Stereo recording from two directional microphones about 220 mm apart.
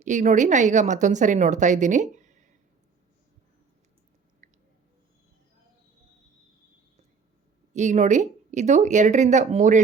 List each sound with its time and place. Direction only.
0.0 s a woman's voice: 35° right (ahead or behind)
4.4 s a sound: 35° right (ahead or behind)
7.7 s a woman's voice: 30° right (ahead or behind)